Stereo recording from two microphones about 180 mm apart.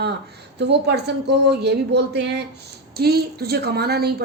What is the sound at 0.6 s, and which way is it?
A woman's voice, 70° right (ahead or behind).